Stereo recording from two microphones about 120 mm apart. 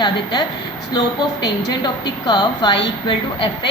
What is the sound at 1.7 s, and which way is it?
A woman's voice, 35° left (ahead or behind).